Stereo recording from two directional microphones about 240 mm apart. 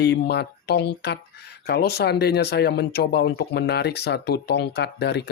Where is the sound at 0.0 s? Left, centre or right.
Left.